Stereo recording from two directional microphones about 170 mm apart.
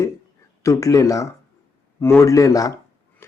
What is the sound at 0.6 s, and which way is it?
Speech, 20° left (ahead or behind).